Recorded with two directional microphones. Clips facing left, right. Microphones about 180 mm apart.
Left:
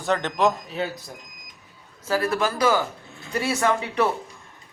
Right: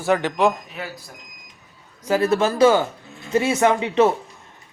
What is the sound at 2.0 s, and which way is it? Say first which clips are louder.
A man's voice: right 5 dB; 20° right (ahead or behind).